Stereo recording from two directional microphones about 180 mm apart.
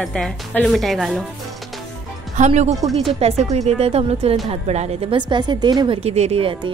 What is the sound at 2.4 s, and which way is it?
A woman's voice, 40° right (ahead or behind).